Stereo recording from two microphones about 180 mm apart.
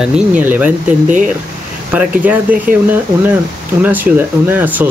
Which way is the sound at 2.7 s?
50° right (ahead or behind).